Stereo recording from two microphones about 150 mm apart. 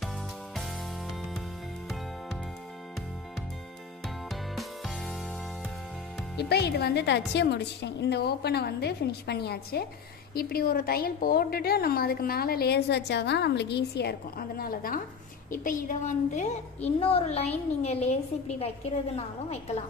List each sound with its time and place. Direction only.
4.3 s music: centre (ahead or behind)
6.3 s a woman's voice: 90° left
14.6 s a woman's voice: 75° left (ahead or behind)
15.5 s a woman's voice: 65° left (ahead or behind); by 19.8 s 40° left (ahead or behind)